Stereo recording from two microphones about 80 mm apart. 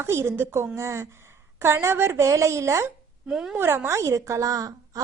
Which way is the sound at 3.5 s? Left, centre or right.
Right.